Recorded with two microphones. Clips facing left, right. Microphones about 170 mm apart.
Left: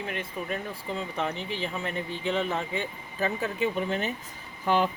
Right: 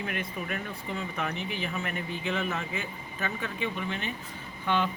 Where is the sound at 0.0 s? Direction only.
25° left (ahead or behind).